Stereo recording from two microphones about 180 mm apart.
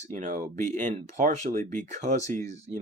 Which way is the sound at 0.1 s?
45° right (ahead or behind).